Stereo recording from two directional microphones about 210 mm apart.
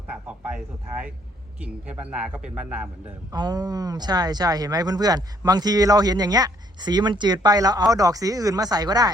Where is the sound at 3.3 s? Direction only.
20° right (ahead or behind).